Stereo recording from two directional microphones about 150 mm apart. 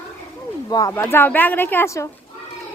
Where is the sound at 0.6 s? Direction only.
25° left (ahead or behind).